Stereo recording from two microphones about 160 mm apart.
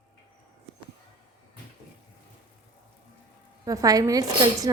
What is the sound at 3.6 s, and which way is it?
Speech, 20° right (ahead or behind).